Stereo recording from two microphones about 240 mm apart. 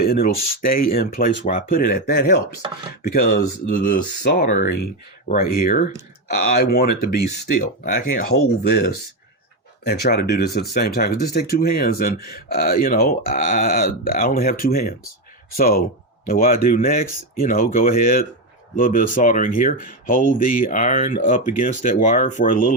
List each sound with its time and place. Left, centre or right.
0.0 s speech: left
2.6 s chopping: right
3.1 s speech: left
8.6 s speech: left